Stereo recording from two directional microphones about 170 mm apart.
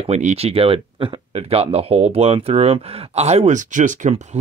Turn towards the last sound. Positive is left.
turn(degrees=-45)  # may be behind; listen again after turning